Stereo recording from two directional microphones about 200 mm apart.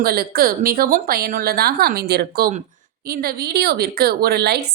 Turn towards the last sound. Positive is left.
turn(degrees=-55)  # may be behind; listen again after turning